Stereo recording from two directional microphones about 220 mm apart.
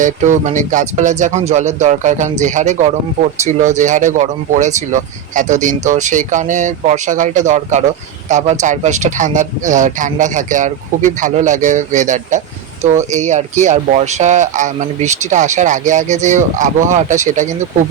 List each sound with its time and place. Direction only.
0.0 s speech: 35° right (ahead or behind)